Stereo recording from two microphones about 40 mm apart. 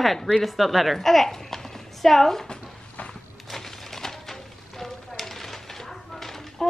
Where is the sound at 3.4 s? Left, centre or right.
Centre.